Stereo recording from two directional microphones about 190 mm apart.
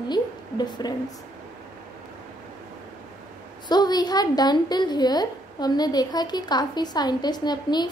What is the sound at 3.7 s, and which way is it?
A woman's voice, 20° left (ahead or behind).